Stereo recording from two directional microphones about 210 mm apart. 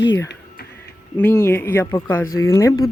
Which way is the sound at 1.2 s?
10° left (ahead or behind).